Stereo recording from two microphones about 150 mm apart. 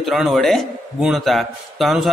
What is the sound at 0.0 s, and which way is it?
A man's voice, centre (ahead or behind).